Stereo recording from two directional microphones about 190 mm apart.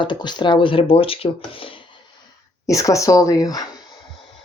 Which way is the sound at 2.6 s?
15° left (ahead or behind).